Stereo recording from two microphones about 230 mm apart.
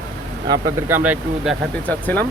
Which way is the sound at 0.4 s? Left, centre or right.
Centre.